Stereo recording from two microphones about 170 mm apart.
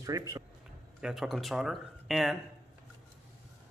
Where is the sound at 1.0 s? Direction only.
Centre (ahead or behind).